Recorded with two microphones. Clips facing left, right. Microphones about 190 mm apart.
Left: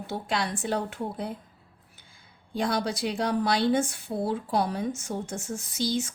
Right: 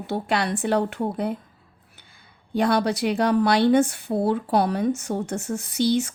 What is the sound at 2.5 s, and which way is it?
Speech, 65° right (ahead or behind).